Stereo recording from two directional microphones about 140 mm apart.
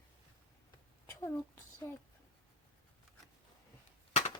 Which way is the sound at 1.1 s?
20° left (ahead or behind).